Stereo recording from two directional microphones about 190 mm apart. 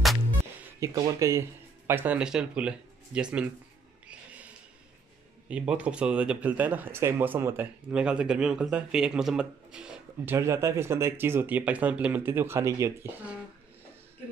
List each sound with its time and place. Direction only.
0.7 s speech: 20° right (ahead or behind)
4.1 s a sound: 5° right (ahead or behind)
5.5 s speech: 5° right (ahead or behind)